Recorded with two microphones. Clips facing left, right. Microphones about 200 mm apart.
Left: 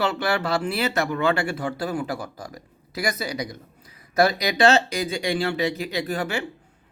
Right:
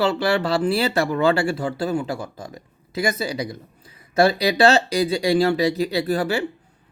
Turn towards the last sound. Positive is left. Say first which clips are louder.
# right 5 dB
turn(degrees=-35)  # may be behind; listen again after turning